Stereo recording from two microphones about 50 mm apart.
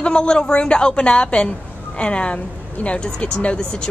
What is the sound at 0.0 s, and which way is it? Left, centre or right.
A woman's voice, centre.